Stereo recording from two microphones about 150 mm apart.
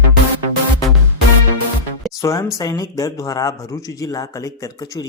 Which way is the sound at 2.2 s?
20° left (ahead or behind).